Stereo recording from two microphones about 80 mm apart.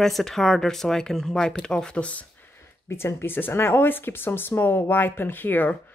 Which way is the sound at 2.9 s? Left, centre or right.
Left.